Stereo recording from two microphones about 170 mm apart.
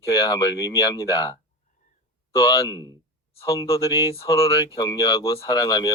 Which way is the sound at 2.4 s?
20° left (ahead or behind).